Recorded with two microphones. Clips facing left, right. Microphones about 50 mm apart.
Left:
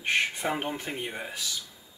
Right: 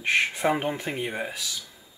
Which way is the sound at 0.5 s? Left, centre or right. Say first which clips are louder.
Right 5 dB; right.